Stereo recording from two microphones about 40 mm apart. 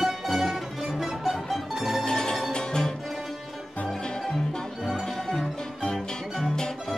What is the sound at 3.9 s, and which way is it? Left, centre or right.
Music, centre.